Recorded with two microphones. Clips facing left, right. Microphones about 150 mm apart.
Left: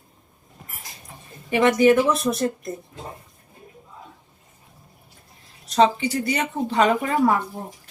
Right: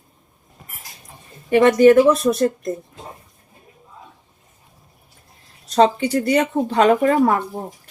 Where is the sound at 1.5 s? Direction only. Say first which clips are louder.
Right 5 dB; 40° right (ahead or behind).